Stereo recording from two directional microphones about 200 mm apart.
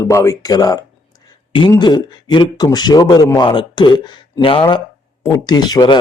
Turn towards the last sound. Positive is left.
turn(degrees=20)  # may be behind; listen again after turning